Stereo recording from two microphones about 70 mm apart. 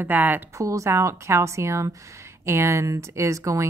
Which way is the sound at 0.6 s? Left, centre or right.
Right.